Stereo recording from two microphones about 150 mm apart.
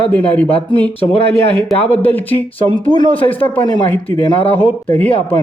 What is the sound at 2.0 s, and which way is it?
Speech, 10° left (ahead or behind).